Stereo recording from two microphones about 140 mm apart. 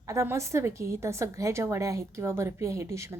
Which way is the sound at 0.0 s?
20° right (ahead or behind).